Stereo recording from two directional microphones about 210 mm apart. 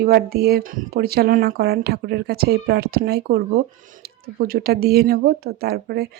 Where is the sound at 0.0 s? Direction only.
50° right (ahead or behind).